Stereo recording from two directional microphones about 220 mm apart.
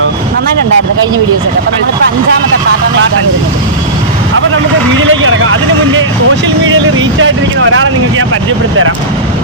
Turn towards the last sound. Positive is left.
turn(degrees=-65)  # may be behind; listen again after turning